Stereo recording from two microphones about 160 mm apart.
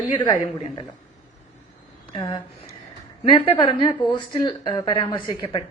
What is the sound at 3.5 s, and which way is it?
A woman's voice, 35° left (ahead or behind).